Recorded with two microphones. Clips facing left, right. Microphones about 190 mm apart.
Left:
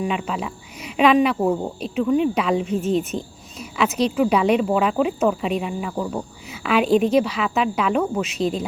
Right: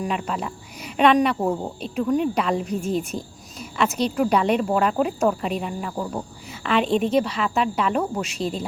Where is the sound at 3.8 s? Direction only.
5° left (ahead or behind).